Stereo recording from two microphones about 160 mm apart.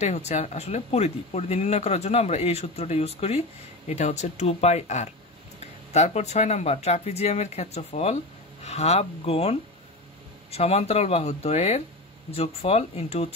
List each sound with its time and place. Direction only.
0.0 s speech: 45° left (ahead or behind)